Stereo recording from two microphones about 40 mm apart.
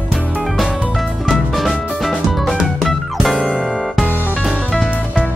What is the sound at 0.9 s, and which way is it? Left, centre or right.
Music, centre.